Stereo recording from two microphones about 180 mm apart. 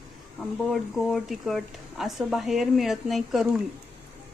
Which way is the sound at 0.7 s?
Centre (ahead or behind).